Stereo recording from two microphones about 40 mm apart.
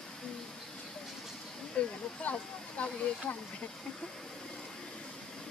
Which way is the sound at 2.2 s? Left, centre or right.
Left.